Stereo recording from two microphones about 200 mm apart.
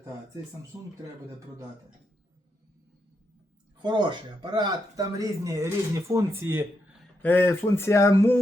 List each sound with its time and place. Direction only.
3.8 s speech: 25° right (ahead or behind)
7.2 s speech: 10° left (ahead or behind)